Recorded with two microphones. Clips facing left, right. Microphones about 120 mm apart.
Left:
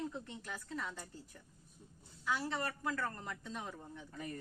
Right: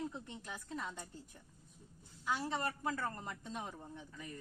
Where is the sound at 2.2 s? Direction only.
20° right (ahead or behind).